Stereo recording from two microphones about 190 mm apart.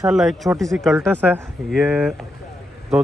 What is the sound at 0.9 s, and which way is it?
Speech, 10° right (ahead or behind).